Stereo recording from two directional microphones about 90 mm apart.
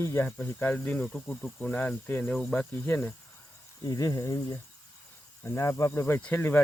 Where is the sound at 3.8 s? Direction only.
40° left (ahead or behind).